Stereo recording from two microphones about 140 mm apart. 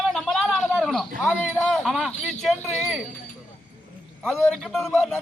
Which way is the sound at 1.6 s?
Centre (ahead or behind).